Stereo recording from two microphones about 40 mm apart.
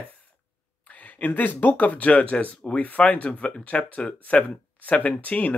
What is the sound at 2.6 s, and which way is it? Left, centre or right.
Speech, left.